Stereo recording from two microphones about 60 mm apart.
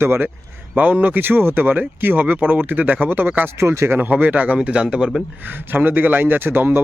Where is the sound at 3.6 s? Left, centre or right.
Right.